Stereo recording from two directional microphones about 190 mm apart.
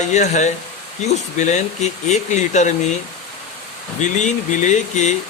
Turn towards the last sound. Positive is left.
turn(degrees=35)  # may be behind; listen again after turning